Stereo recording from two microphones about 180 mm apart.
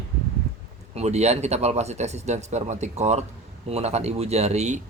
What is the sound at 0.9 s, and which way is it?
Speech, 40° right (ahead or behind).